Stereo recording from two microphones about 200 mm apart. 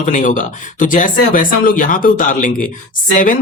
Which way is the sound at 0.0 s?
40° left (ahead or behind).